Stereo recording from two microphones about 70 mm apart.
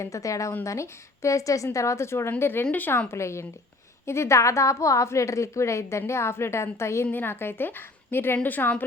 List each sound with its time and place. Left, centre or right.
0.0 s a woman's voice: left
3.1 s a woman's voice: left
7.1 s a woman's voice: left